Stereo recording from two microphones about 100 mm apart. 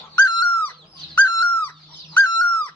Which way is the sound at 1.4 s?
20° left (ahead or behind).